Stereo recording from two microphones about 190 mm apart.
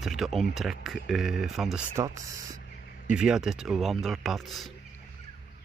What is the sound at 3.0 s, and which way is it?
Speech, 5° right (ahead or behind).